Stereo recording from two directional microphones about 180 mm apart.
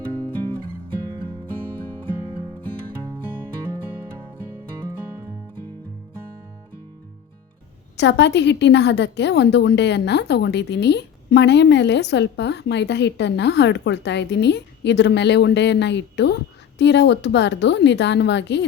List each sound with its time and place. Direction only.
7.9 s a woman's voice: 75° left (ahead or behind)